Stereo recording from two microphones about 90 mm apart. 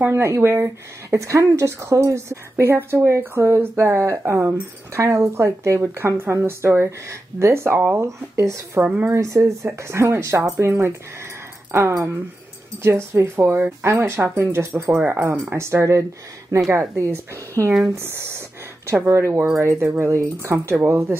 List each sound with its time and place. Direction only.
0.0 s a woman's voice: 30° right (ahead or behind)
8.8 s speech: 15° right (ahead or behind)
9.1 s a woman's voice: 35° right (ahead or behind)